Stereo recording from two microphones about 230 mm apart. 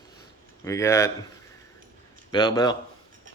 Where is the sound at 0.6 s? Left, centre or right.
Centre.